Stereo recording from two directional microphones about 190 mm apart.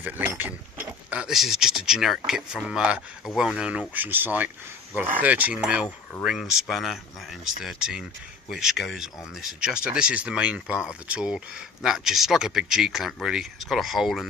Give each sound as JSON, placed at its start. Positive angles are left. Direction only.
{"t": 0.0, "sound": "speech", "side_deg": -10}